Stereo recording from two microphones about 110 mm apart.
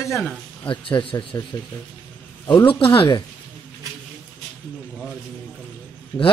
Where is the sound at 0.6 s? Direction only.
50° left (ahead or behind).